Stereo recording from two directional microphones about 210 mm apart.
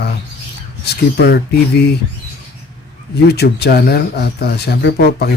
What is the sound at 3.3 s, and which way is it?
Speech, 50° left (ahead or behind).